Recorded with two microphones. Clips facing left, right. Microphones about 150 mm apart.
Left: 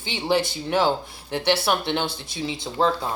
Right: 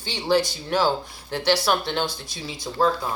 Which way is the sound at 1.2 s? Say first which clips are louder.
Even; 25° left (ahead or behind).